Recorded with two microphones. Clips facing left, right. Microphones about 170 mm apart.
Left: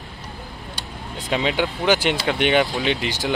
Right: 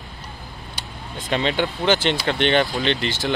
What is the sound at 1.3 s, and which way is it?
Speech, 5° left (ahead or behind).